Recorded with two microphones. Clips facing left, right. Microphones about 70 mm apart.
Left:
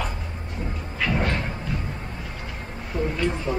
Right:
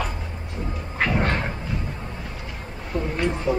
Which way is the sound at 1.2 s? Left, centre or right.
Right.